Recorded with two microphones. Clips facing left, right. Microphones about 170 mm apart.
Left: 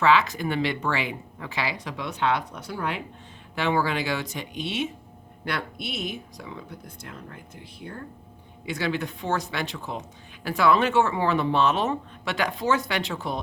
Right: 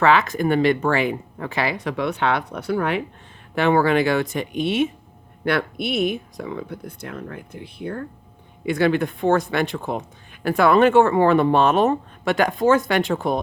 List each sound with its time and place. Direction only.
0.0 s speech: 50° right (ahead or behind)